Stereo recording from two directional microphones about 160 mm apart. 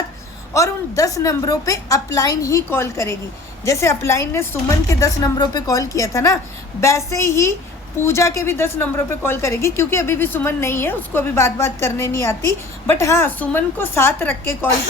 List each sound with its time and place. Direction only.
0.5 s a woman's voice: 20° left (ahead or behind)